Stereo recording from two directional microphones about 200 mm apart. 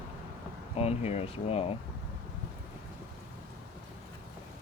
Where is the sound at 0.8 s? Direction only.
30° left (ahead or behind).